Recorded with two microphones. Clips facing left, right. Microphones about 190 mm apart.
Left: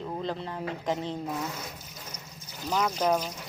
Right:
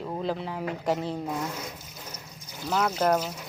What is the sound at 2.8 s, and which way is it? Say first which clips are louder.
Speech: right 2 dB; 5° right (ahead or behind).